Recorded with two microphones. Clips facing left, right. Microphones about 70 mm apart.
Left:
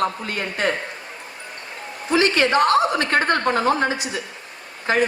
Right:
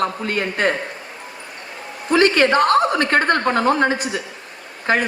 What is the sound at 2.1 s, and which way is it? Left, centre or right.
A man's voice, right.